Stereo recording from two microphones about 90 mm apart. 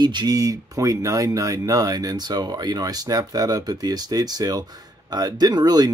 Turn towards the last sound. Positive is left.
turn(degrees=-50)  # may be behind; listen again after turning